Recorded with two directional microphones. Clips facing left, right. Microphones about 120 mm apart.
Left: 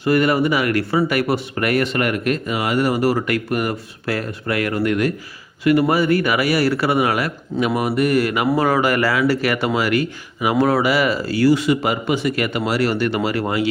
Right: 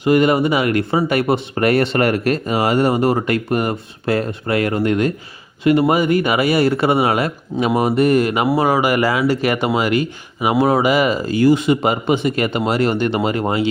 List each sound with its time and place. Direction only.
0.0 s speech: 20° right (ahead or behind)